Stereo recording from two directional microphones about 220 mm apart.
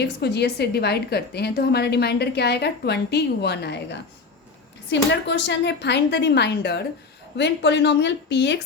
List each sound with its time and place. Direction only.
0.0 s a woman's voice: 50° left (ahead or behind)
5.1 s a woman's voice: 55° left (ahead or behind)